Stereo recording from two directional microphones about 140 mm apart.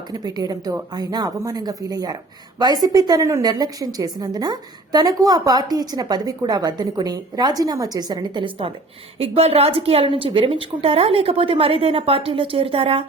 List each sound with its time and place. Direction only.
0.1 s a woman's voice: 30° right (ahead or behind); by 13.1 s 45° right (ahead or behind)